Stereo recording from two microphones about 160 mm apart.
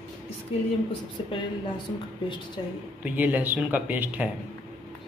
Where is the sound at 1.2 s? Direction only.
35° left (ahead or behind).